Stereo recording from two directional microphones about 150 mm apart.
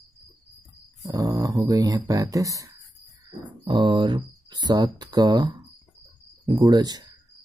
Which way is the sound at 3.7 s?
30° right (ahead or behind).